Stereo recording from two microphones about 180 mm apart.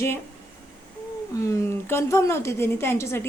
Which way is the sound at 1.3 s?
15° left (ahead or behind).